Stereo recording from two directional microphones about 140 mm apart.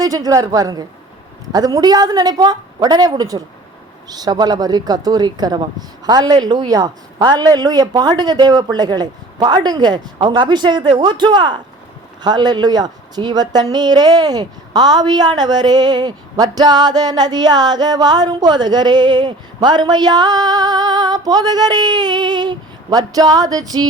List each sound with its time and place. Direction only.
0.0 s a woman's voice: 25° right (ahead or behind)